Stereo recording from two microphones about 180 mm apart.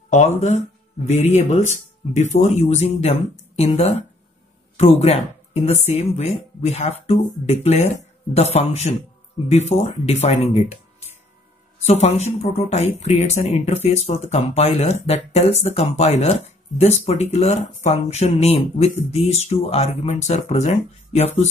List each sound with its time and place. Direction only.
0.4 s speech: 40° left (ahead or behind)
11.8 s speech: 40° left (ahead or behind)